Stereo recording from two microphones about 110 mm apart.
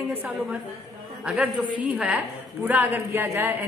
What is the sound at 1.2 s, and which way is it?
A woman's voice, 10° right (ahead or behind).